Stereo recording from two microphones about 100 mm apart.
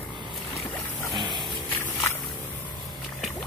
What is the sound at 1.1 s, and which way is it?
Dog, 50° right (ahead or behind).